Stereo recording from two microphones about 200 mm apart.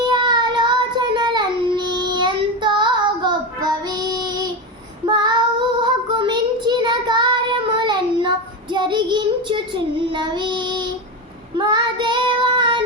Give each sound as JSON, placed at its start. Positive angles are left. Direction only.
{"t": 0.0, "sound": "child singing", "side_deg": -25}